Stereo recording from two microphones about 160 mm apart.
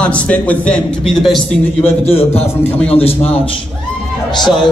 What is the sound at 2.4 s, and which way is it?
Speech, 10° left (ahead or behind).